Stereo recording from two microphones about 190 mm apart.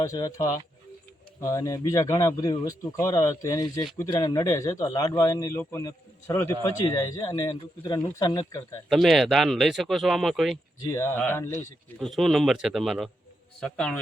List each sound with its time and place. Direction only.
0.0 s speech: 20° left (ahead or behind)
8.9 s speech: centre (ahead or behind)
10.8 s speech: 15° left (ahead or behind)
11.9 s speech: centre (ahead or behind)